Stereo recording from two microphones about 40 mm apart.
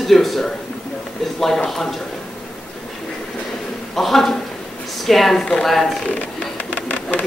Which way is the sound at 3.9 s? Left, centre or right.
Centre.